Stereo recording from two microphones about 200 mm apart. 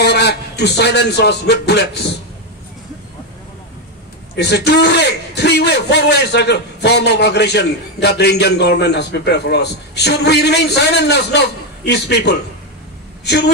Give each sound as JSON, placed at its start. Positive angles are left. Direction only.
{"t": 0.0, "sound": "a man's voice", "side_deg": 55}
{"t": 4.4, "sound": "a man's voice", "side_deg": 55}